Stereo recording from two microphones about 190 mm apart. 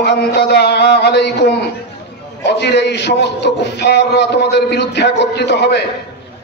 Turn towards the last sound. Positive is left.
turn(degrees=65)  # may be behind; listen again after turning